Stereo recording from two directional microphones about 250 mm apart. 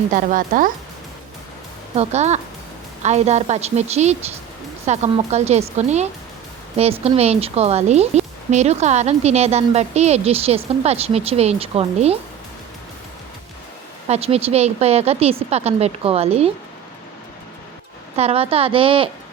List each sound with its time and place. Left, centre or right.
0.1 s speech: right
2.0 s speech: right
14.1 s speech: right
18.2 s speech: right